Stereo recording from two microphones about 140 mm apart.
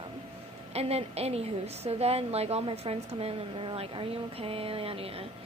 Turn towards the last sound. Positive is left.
turn(degrees=-45)  # may be behind; listen again after turning